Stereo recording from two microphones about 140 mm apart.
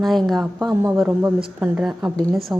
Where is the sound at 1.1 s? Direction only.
10° right (ahead or behind).